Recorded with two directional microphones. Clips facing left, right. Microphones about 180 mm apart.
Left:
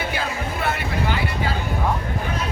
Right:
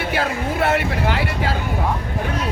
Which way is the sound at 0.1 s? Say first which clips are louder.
Right 5 dB; 75° right (ahead or behind).